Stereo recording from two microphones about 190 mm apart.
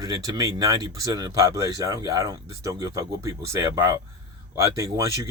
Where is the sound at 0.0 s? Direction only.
20° right (ahead or behind).